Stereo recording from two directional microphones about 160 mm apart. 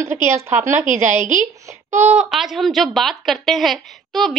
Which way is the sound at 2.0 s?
5° right (ahead or behind).